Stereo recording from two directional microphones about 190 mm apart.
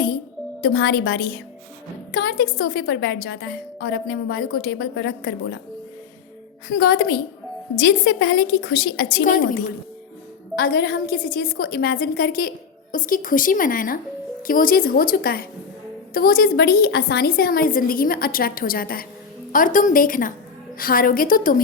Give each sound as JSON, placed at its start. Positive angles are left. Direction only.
{"t": 0.6, "sound": "a woman's voice", "side_deg": 55}
{"t": 6.7, "sound": "a woman's voice", "side_deg": 55}
{"t": 8.2, "sound": "a woman's voice", "side_deg": 55}